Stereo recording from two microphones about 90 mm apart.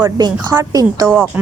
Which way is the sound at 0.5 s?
25° right (ahead or behind).